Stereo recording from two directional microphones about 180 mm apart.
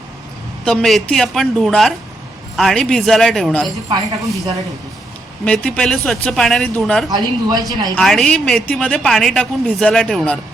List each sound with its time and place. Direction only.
0.6 s a woman's voice: 5° left (ahead or behind)
3.8 s speech: 20° right (ahead or behind)
5.5 s a woman's voice: 5° left (ahead or behind)
7.1 s speech: 20° right (ahead or behind)
7.9 s a woman's voice: 5° left (ahead or behind)